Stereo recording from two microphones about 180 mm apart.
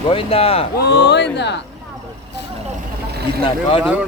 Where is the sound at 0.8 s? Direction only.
65° left (ahead or behind).